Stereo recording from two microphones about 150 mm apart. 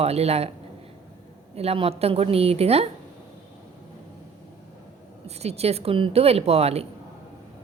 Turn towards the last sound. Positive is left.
turn(degrees=-45)  # may be behind; listen again after turning